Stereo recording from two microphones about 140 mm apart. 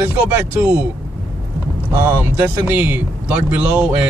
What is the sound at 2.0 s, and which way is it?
Speech, 20° right (ahead or behind).